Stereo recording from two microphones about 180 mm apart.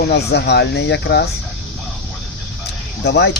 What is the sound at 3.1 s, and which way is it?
Speech, 65° left (ahead or behind).